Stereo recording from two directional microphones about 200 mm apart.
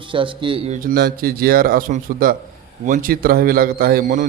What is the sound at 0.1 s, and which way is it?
Speech, 25° right (ahead or behind).